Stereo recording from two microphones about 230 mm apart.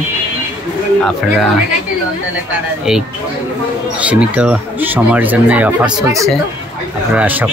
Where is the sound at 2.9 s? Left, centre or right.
Centre.